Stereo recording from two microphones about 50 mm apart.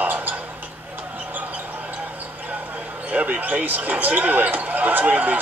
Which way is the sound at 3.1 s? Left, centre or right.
Right.